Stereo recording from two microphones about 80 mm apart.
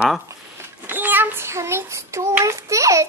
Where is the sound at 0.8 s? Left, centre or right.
Right.